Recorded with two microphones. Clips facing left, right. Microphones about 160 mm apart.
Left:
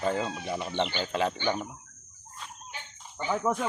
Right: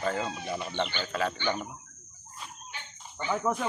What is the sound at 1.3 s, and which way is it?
Speech, 10° left (ahead or behind).